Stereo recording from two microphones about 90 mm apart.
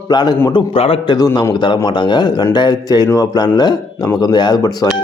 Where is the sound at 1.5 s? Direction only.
60° left (ahead or behind).